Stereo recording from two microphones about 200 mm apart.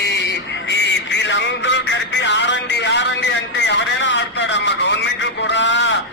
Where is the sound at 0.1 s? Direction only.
60° left (ahead or behind).